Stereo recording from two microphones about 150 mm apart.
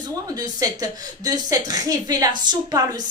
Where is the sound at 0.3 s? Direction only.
25° right (ahead or behind).